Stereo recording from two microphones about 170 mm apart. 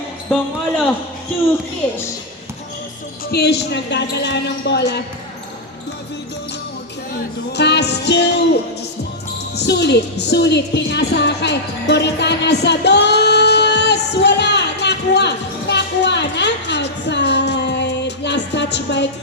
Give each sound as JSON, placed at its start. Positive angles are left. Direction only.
{"t": 3.3, "sound": "a woman's voice", "side_deg": 75}
{"t": 4.1, "sound": "music", "side_deg": 85}
{"t": 7.5, "sound": "music", "side_deg": 85}
{"t": 9.6, "sound": "music", "side_deg": 80}